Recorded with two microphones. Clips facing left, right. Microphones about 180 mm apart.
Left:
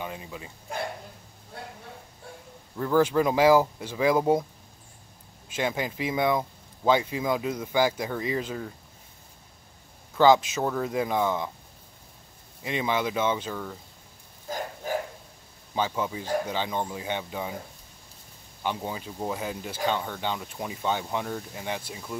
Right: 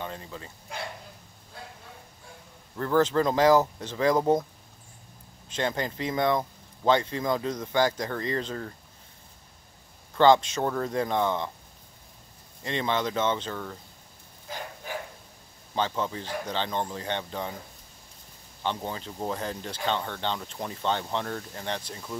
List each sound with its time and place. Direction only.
0.0 s speech: 10° left (ahead or behind)
2.8 s speech: 10° left (ahead or behind)
5.5 s speech: 5° left (ahead or behind)
10.1 s speech: 5° left (ahead or behind)
12.6 s speech: 10° left (ahead or behind)
14.5 s dog: 45° left (ahead or behind)
15.7 s speech: 10° left (ahead or behind)
18.6 s speech: 10° left (ahead or behind)